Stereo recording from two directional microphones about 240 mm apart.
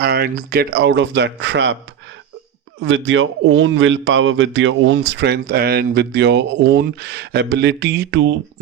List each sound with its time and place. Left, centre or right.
0.0 s speech: right
2.8 s speech: right